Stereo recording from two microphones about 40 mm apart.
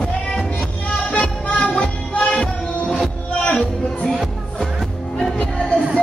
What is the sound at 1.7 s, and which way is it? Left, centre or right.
Music, left.